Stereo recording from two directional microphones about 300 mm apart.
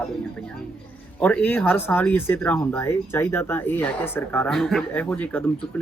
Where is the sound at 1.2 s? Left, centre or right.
Centre.